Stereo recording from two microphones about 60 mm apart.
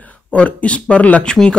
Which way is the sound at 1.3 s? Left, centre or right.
Centre.